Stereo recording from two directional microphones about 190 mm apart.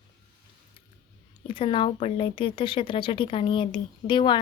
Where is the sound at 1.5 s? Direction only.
25° left (ahead or behind).